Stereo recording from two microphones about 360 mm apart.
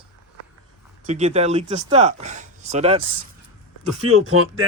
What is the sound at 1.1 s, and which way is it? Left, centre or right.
Speech, centre.